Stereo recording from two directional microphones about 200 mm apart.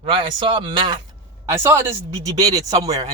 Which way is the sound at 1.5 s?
10° right (ahead or behind).